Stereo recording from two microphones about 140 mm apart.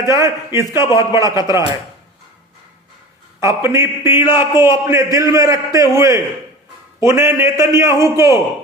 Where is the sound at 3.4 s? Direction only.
20° right (ahead or behind).